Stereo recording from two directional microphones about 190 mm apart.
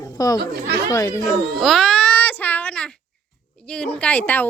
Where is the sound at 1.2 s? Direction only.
Centre (ahead or behind).